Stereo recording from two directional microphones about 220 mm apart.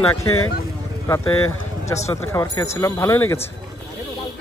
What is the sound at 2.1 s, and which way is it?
Speech, 15° left (ahead or behind).